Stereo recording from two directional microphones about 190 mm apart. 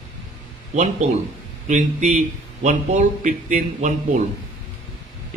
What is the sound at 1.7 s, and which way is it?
A man's voice, 40° right (ahead or behind).